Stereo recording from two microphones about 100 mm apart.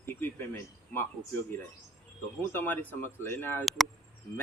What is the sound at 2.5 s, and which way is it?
Speech, 20° left (ahead or behind).